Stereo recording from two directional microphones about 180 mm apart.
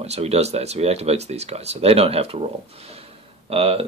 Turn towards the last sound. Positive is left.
turn(degrees=-35)  # may be behind; listen again after turning